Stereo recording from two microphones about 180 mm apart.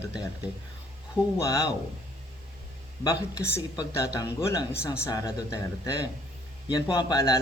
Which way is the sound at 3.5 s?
15° left (ahead or behind).